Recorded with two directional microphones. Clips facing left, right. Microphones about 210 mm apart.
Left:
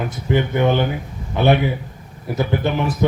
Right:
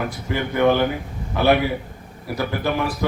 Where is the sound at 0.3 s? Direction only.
20° left (ahead or behind).